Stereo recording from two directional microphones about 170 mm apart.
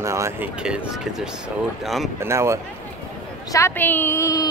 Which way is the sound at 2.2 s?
15° right (ahead or behind).